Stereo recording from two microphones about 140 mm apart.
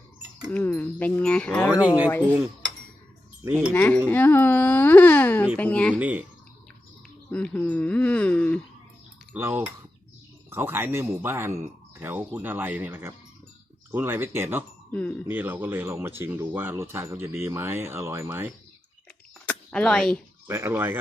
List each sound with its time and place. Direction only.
0.5 s speech: 10° left (ahead or behind)
3.4 s speech: 10° right (ahead or behind)
3.8 s speech: 10° left (ahead or behind)
6.0 s speech: 10° right (ahead or behind)
7.3 s speech: 10° left (ahead or behind)
9.3 s speech: 15° right (ahead or behind)
14.9 s speech: 10° left (ahead or behind)
15.3 s speech: 10° right (ahead or behind)
19.5 s a sound: 5° left (ahead or behind)
20.5 s speech: 15° right (ahead or behind)